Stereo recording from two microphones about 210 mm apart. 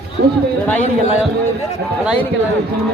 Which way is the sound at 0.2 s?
50° right (ahead or behind).